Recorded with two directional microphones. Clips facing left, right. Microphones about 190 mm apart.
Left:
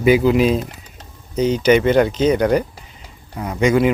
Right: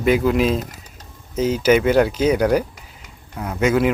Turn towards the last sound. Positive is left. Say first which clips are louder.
# left 2 dB
turn(degrees=0)  # may be behind; listen again after turning